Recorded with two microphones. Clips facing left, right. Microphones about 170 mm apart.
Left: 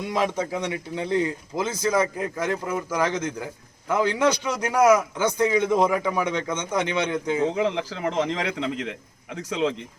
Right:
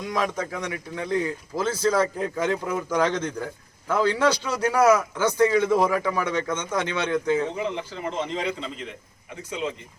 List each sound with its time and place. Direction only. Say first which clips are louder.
0.1 s a man's voice: left 2 dB; 25° left (ahead or behind)
7.5 s a man's voice: left 4 dB; 90° left